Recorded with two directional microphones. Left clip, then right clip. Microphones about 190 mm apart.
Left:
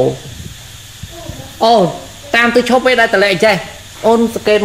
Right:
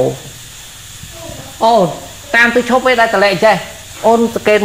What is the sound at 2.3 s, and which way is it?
A woman's voice, 25° left (ahead or behind).